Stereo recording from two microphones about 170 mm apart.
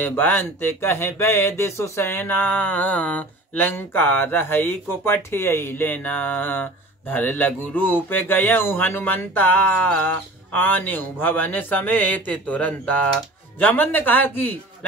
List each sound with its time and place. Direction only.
0.0 s speech: 10° left (ahead or behind)